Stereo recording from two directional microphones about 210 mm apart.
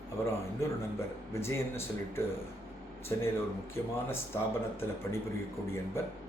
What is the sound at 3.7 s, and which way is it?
Speech, 10° left (ahead or behind).